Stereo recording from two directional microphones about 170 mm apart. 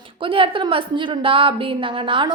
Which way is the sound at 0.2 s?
30° right (ahead or behind).